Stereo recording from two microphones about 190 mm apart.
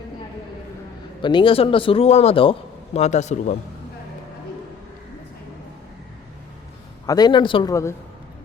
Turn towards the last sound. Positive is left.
turn(degrees=25)  # may be behind; listen again after turning